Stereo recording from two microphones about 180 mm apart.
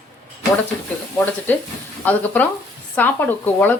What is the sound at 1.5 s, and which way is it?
Speech, 10° left (ahead or behind).